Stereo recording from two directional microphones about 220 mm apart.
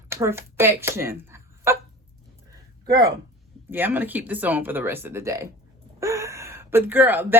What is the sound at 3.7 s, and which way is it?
Speech, 10° right (ahead or behind).